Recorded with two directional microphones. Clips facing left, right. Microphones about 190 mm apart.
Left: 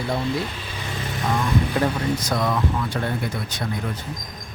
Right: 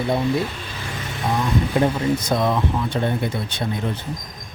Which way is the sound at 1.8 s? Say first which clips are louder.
Right 3 dB; 20° right (ahead or behind).